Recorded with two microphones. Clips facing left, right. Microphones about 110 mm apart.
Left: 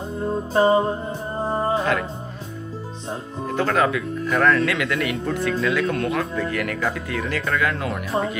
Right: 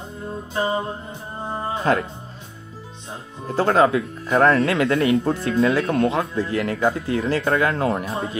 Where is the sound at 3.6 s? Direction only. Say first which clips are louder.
Right 4 dB; 30° right (ahead or behind).